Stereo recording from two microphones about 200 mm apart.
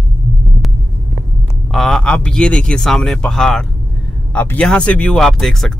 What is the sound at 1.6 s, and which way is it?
Speech, centre (ahead or behind).